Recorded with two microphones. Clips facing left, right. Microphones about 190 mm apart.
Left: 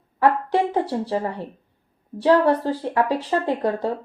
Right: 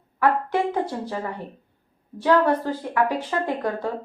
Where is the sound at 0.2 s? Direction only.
35° left (ahead or behind).